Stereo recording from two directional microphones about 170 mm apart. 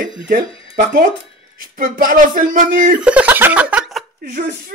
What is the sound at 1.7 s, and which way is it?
Speech, 55° right (ahead or behind).